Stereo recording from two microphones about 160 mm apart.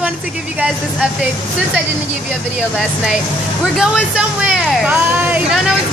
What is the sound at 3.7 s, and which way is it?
Speech, 5° right (ahead or behind).